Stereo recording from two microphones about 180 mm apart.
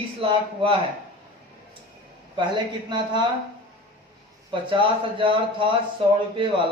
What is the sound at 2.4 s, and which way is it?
Speech, 25° right (ahead or behind).